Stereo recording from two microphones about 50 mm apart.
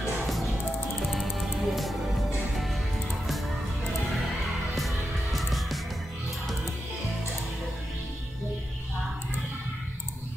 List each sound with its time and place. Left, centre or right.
0.0 s music: centre
3.3 s music: centre